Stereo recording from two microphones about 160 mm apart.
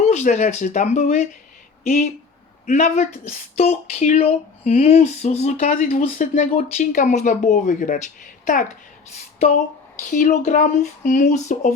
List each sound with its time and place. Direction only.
0.0 s speech: 45° left (ahead or behind)
2.6 s speech: 45° left (ahead or behind)
10.0 s speech: 55° left (ahead or behind)